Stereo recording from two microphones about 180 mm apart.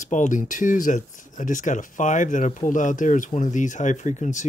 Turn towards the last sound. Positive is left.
turn(degrees=40)  # may be behind; listen again after turning